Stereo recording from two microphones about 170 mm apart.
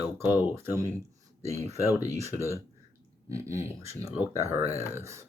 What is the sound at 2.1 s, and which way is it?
Speech, 15° right (ahead or behind).